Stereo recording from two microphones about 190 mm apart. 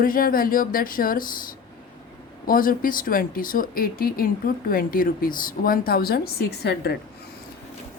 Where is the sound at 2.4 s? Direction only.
50° left (ahead or behind).